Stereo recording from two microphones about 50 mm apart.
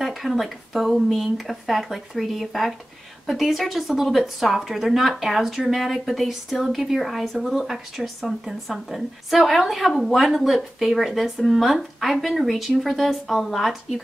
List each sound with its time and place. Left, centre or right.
0.0 s a woman's voice: centre